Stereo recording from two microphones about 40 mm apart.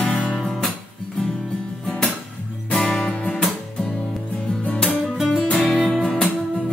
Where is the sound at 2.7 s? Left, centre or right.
Left.